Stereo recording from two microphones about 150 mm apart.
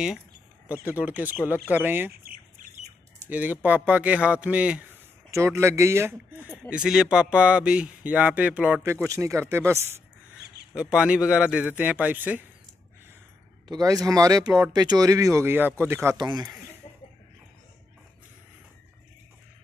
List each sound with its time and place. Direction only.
0.9 s speech: 10° right (ahead or behind)
2.2 s bird: 75° right (ahead or behind)
3.3 s speech: 10° right (ahead or behind)
5.3 s speech: 20° right (ahead or behind)
6.7 s speech: 5° right (ahead or behind)
10.7 s speech: 5° right (ahead or behind)
13.7 s speech: 25° right (ahead or behind)
16.2 s speech: 30° right (ahead or behind)